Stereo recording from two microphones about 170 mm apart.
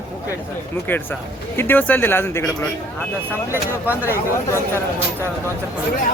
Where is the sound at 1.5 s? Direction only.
10° left (ahead or behind).